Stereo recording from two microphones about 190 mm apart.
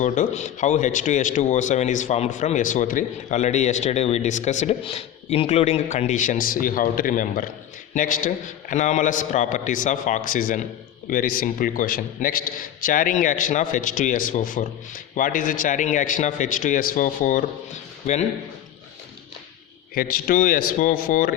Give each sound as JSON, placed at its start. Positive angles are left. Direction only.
{"t": 0.0, "sound": "a man's voice", "side_deg": 40}
{"t": 19.9, "sound": "a man's voice", "side_deg": 50}